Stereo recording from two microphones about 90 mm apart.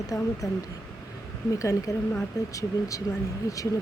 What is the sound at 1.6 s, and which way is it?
Speech, 40° left (ahead or behind).